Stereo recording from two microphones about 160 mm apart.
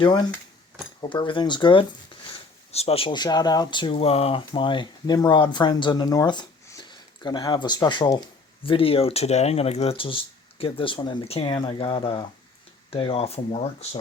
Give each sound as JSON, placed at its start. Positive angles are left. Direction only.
{"t": 0.0, "sound": "speech", "side_deg": 25}